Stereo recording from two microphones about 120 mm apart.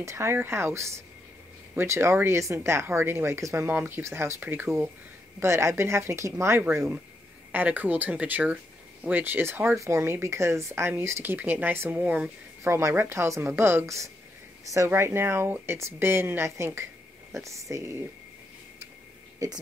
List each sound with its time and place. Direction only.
0.0 s speech: 25° right (ahead or behind)
12.6 s speech: 20° right (ahead or behind)